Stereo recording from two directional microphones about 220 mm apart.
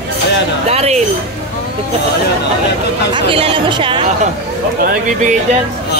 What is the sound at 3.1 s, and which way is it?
Speech, 25° right (ahead or behind).